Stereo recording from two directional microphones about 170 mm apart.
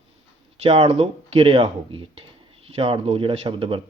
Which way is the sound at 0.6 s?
35° right (ahead or behind).